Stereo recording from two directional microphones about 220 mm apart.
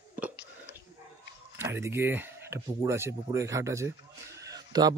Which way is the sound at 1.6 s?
10° right (ahead or behind).